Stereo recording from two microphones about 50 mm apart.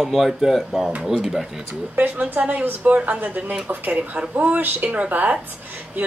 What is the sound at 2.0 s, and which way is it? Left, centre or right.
A woman's voice, right.